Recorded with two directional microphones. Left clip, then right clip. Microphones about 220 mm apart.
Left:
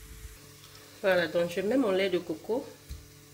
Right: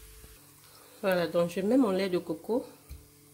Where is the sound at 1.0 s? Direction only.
50° right (ahead or behind).